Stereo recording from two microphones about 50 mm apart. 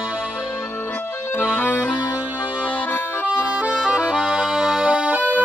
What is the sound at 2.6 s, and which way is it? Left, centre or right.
Accordion, left.